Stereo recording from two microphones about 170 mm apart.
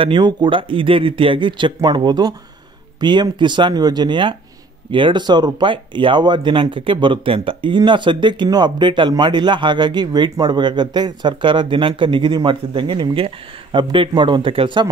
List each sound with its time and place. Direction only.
0.0 s speech: 30° right (ahead or behind)